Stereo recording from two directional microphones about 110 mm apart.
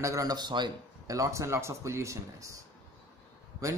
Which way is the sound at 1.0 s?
30° right (ahead or behind).